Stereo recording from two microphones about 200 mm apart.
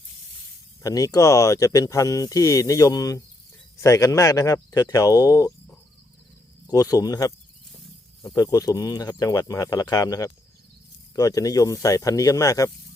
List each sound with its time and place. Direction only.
0.8 s speech: 15° left (ahead or behind)